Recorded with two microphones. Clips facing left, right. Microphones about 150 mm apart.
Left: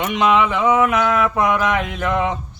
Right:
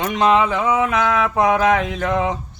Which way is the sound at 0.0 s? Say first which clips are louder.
Right 1 dB; 35° right (ahead or behind).